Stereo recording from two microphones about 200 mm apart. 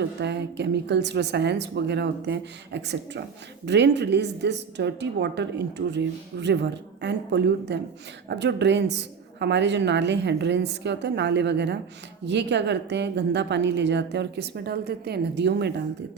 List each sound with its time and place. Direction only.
0.0 s a woman's voice: 60° right (ahead or behind)